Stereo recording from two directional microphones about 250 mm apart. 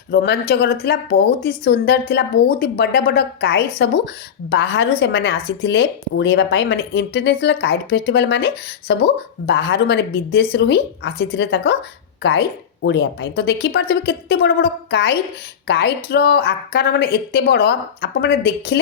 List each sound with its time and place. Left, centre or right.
0.1 s a woman's voice: left